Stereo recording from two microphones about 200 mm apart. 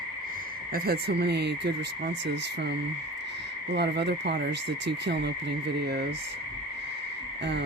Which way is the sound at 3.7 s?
55° right (ahead or behind).